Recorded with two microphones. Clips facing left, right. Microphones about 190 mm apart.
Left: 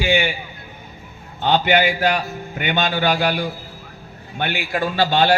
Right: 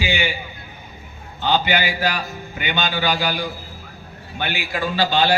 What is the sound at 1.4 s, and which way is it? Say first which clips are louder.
A man's voice: left 3 dB; 55° left (ahead or behind).